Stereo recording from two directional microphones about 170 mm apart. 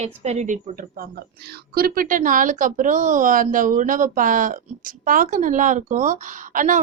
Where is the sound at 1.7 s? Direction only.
60° right (ahead or behind).